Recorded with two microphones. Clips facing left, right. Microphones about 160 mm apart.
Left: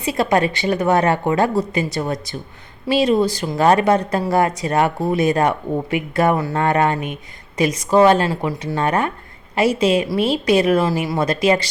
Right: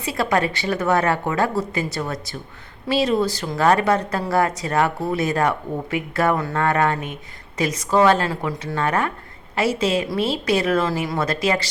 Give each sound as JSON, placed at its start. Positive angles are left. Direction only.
{"t": 0.0, "sound": "speech", "side_deg": 20}